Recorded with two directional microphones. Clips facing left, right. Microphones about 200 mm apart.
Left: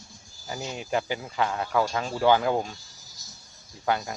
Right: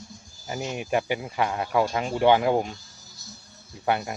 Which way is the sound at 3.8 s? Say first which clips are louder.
Right 2 dB; 25° right (ahead or behind).